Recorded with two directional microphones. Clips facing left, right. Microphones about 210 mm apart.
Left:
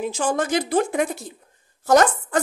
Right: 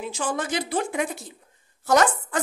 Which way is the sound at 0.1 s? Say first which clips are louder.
Left 3 dB; 45° left (ahead or behind).